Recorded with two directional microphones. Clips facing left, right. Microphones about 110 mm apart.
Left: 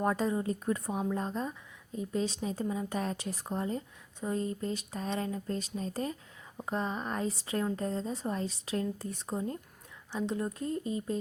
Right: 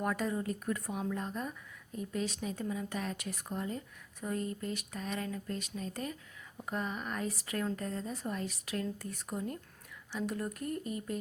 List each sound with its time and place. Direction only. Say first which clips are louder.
0.0 s speech: left 4 dB; 30° left (ahead or behind)